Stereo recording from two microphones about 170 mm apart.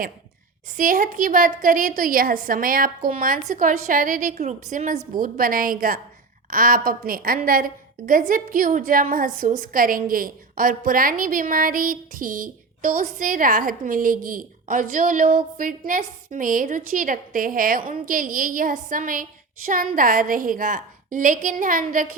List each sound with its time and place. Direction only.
0.8 s a woman's voice: 55° right (ahead or behind)